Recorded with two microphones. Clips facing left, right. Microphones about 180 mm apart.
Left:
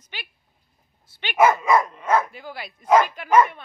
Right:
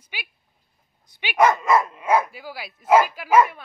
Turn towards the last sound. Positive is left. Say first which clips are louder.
# even
turn(degrees=-5)  # may be behind; listen again after turning